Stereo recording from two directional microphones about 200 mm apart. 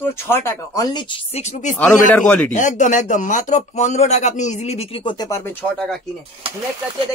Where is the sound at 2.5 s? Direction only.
40° left (ahead or behind); by 5.9 s 10° left (ahead or behind).